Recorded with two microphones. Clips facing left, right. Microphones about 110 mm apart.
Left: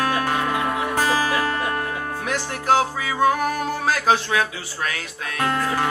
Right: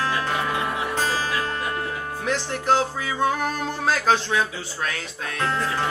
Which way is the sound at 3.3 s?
55° left (ahead or behind).